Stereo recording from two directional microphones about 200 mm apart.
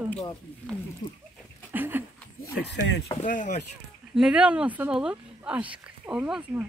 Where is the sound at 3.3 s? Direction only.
40° left (ahead or behind).